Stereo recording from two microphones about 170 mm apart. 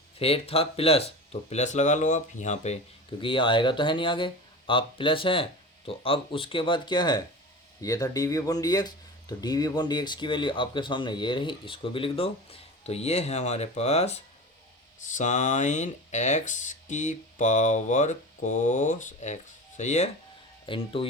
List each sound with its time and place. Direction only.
0.2 s speech: 35° left (ahead or behind)
3.2 s speech: 30° left (ahead or behind)
20.7 s speech: 30° left (ahead or behind)